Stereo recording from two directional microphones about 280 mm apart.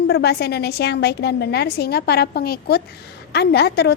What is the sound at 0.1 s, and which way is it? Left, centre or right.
A woman's voice, left.